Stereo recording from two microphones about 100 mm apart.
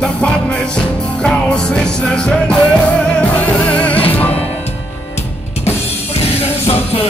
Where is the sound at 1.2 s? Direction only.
10° left (ahead or behind).